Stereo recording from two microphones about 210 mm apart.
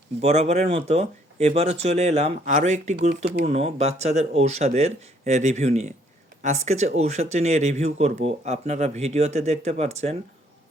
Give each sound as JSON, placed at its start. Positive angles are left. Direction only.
{"t": 0.2, "sound": "speech", "side_deg": -30}